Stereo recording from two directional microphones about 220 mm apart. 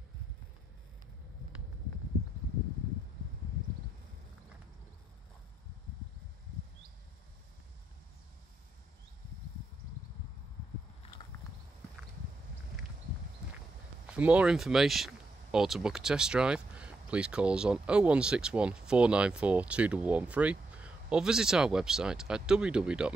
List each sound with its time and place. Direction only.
14.0 s speech: 5° right (ahead or behind)